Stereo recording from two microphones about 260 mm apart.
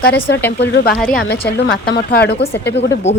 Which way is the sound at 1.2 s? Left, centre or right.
Left.